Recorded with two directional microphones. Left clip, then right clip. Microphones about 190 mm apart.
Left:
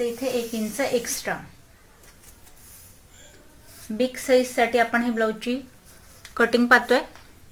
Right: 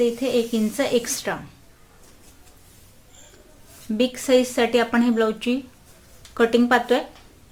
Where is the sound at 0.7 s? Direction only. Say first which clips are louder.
Right 1 dB; 30° right (ahead or behind).